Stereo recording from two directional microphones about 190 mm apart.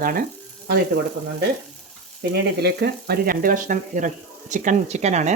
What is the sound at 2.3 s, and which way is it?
Speech, 60° right (ahead or behind).